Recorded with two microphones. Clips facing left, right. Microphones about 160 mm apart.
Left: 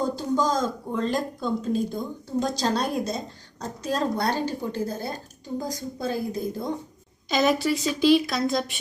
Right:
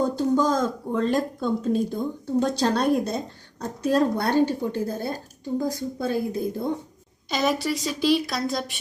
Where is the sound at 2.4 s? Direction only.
60° right (ahead or behind).